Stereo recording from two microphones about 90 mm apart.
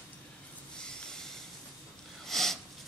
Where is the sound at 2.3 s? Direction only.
5° left (ahead or behind).